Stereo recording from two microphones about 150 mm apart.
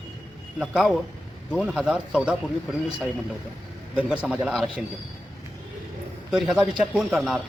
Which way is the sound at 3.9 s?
5° right (ahead or behind).